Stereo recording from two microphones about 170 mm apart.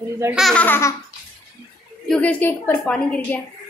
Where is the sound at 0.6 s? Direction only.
10° left (ahead or behind).